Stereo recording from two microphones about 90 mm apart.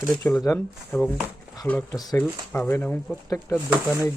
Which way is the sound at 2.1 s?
20° left (ahead or behind).